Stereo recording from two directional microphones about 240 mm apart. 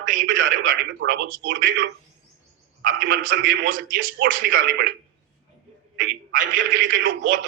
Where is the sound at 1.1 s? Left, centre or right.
Right.